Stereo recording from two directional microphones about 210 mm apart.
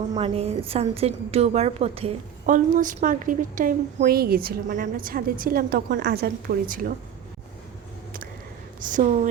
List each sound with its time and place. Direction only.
0.1 s a woman's voice: 25° right (ahead or behind)
8.8 s a woman's voice: 35° right (ahead or behind)